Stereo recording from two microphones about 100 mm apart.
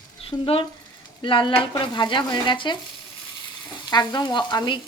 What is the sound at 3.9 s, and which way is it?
Speech, 45° left (ahead or behind).